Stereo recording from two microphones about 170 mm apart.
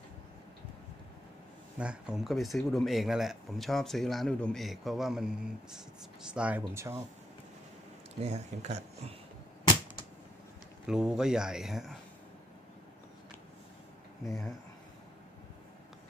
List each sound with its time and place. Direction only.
1.8 s speech: 5° right (ahead or behind)
8.2 s speech: 40° right (ahead or behind)
10.9 s speech: 5° right (ahead or behind)
14.2 s speech: 20° left (ahead or behind)